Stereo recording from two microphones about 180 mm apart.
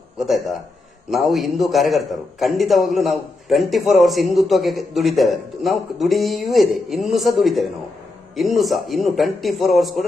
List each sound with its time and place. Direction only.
0.2 s a man's voice: centre (ahead or behind)